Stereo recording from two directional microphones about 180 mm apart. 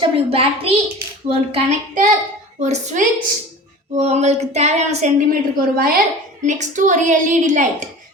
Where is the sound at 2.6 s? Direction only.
40° right (ahead or behind).